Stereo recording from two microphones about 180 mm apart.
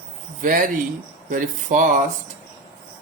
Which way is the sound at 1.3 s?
45° right (ahead or behind).